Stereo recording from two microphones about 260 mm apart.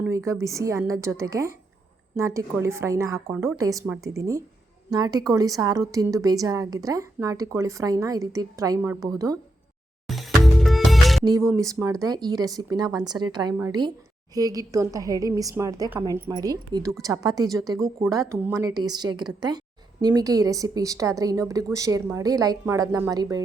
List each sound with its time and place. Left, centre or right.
0.0 s speech: centre
10.1 s music: centre
11.2 s speech: centre